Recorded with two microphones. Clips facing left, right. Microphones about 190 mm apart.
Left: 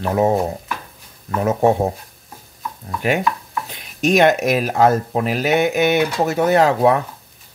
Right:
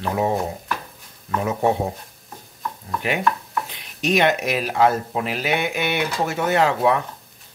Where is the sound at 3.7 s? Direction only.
45° left (ahead or behind).